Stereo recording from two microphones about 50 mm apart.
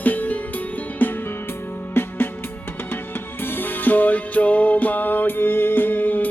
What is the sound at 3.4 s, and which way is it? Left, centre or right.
Music, left.